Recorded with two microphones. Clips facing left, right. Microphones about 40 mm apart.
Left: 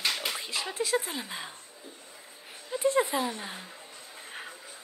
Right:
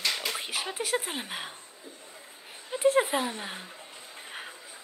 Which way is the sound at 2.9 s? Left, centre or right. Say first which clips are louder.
Right 2 dB; right.